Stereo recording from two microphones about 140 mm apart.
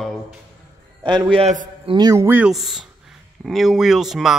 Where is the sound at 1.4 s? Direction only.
55° right (ahead or behind).